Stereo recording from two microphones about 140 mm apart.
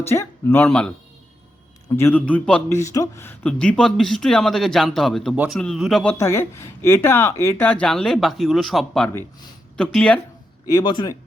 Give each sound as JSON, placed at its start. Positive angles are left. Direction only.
{"t": 0.1, "sound": "speech", "side_deg": 15}
{"t": 2.0, "sound": "speech", "side_deg": 15}
{"t": 2.6, "sound": "speech", "side_deg": 20}
{"t": 6.1, "sound": "speech", "side_deg": 20}
{"t": 10.7, "sound": "speech", "side_deg": 30}